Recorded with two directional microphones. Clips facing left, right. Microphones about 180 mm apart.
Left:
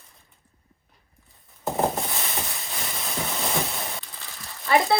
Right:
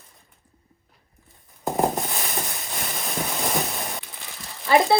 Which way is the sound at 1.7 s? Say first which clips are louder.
Right 2 dB; 15° right (ahead or behind).